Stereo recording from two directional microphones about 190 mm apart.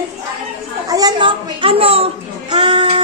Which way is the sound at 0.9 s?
20° right (ahead or behind).